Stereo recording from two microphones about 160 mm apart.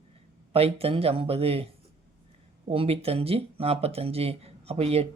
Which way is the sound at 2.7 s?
35° right (ahead or behind).